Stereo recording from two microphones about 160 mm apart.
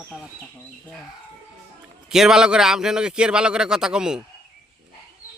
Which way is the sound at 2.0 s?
5° right (ahead or behind).